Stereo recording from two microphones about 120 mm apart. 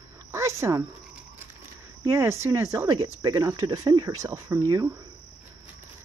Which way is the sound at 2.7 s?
35° right (ahead or behind).